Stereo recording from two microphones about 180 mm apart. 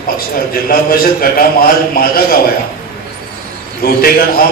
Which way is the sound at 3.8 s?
55° left (ahead or behind).